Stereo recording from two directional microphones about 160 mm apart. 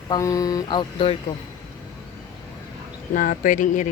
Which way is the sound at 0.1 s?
20° left (ahead or behind).